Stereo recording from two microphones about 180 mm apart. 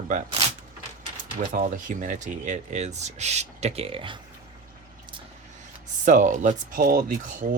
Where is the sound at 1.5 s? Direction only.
45° right (ahead or behind); by 4.2 s 30° right (ahead or behind).